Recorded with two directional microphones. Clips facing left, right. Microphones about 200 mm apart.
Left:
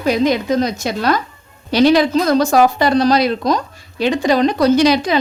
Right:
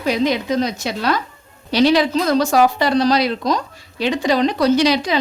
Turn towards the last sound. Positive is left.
turn(degrees=50)  # may be behind; listen again after turning